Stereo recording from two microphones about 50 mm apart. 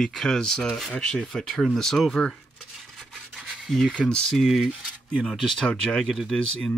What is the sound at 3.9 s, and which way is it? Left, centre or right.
Speech, centre.